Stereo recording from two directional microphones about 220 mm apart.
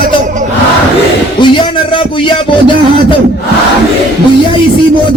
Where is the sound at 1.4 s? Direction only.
20° left (ahead or behind).